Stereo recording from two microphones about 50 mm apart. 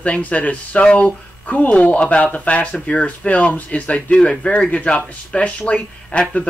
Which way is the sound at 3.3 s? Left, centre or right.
Left.